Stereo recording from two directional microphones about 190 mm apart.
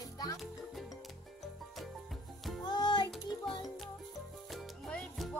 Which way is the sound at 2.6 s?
25° left (ahead or behind).